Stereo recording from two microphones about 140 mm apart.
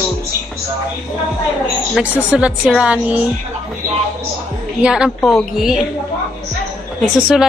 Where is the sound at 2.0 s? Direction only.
5° right (ahead or behind).